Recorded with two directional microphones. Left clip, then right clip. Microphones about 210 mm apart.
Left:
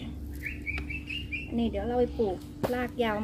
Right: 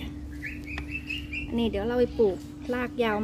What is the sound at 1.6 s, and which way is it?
A woman's voice, 50° right (ahead or behind).